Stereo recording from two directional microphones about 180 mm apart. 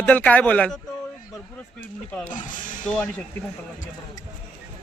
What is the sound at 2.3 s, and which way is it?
Speech, 45° left (ahead or behind).